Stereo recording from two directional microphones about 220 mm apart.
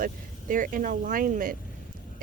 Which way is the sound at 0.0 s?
40° right (ahead or behind).